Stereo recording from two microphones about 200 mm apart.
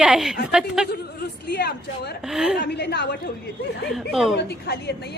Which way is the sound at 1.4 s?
55° left (ahead or behind).